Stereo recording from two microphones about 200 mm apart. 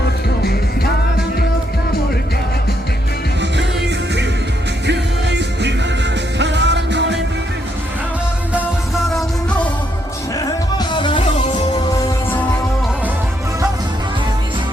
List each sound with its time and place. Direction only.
3.6 s music: 60° right (ahead or behind)
9.1 s music: 5° left (ahead or behind)
10.3 s music: 20° left (ahead or behind)